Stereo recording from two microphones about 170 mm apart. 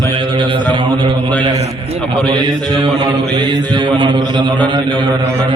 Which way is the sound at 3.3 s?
25° right (ahead or behind).